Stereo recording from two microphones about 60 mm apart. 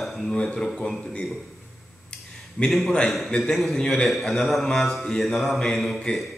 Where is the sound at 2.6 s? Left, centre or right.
Centre.